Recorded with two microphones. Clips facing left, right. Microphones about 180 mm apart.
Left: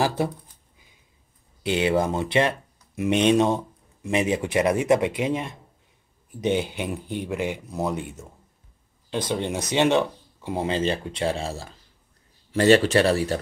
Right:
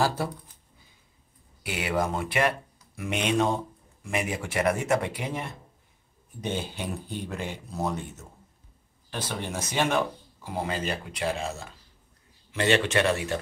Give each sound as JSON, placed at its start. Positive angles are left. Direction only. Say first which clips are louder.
{"t": 0.0, "sound": "speech", "louder": "left 3 dB", "side_deg": 20}
{"t": 1.6, "sound": "speech", "louder": "left 6 dB", "side_deg": 25}
{"t": 9.3, "sound": "speech", "louder": "left 6 dB", "side_deg": 20}